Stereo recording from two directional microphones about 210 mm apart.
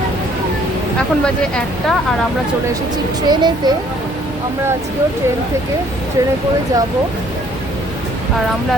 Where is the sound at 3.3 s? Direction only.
20° right (ahead or behind).